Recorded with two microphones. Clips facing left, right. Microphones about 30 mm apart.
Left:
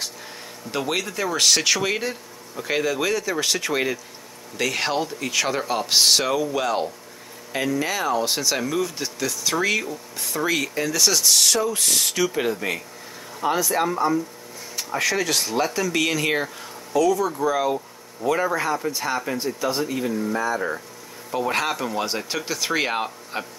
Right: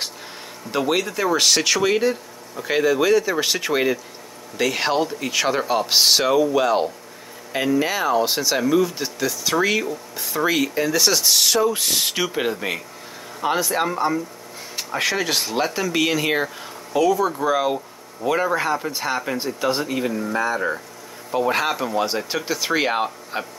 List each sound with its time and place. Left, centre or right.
0.7 s speech: centre
16.9 s speech: right
21.3 s speech: centre